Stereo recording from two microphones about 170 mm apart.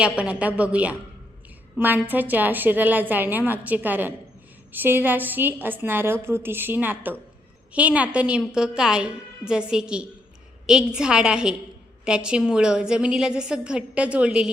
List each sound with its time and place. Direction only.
0.0 s a woman's voice: 5° right (ahead or behind)